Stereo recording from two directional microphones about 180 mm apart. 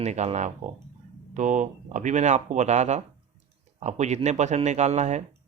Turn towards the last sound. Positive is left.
turn(degrees=-40)  # may be behind; listen again after turning